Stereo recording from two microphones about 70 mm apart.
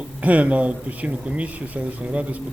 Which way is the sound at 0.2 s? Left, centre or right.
Right.